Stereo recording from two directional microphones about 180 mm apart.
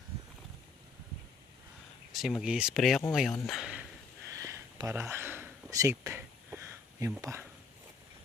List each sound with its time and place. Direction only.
2.1 s speech: centre (ahead or behind)
4.3 s a sound: 15° right (ahead or behind)
7.2 s speech: 15° right (ahead or behind)